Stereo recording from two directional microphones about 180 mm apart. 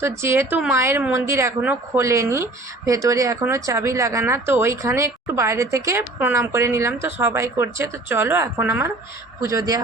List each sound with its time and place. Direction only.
0.0 s a woman's voice: 15° right (ahead or behind)